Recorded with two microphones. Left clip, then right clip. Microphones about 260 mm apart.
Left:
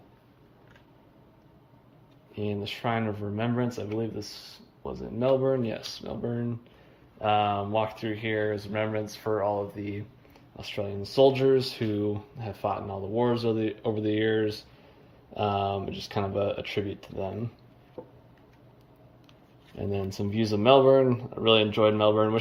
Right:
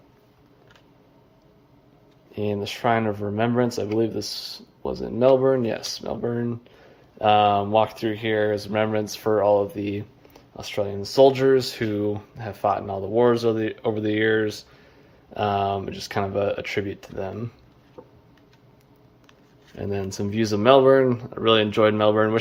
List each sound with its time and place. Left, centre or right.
2.3 s speech: centre
18.0 s a sound: right
19.7 s speech: centre